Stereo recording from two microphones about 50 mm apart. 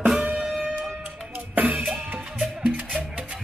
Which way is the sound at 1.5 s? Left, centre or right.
Right.